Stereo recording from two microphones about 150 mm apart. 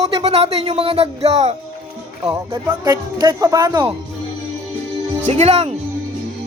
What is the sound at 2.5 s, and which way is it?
Speech, 25° right (ahead or behind).